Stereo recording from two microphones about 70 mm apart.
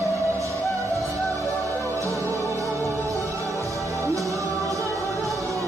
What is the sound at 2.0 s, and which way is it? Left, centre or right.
Music, right.